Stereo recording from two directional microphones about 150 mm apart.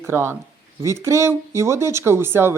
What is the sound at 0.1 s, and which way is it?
Speech, 15° right (ahead or behind).